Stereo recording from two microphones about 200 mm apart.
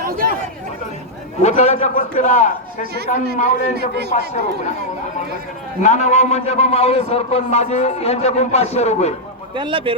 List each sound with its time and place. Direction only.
1.4 s a man's voice: 35° left (ahead or behind)
3.8 s a man's voice: 55° right (ahead or behind)
4.1 s a man's voice: 35° left (ahead or behind)
5.8 s a man's voice: 35° left (ahead or behind)
9.6 s a man's voice: 25° right (ahead or behind)